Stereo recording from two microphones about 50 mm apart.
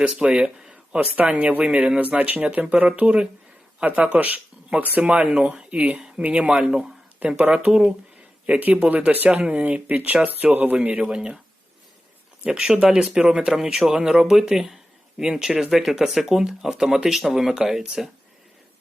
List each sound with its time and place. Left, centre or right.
0.0 s speech: right
8.5 s speech: right
12.5 s speech: centre